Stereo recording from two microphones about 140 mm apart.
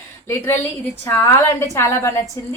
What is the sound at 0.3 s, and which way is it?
A woman's voice, 15° left (ahead or behind).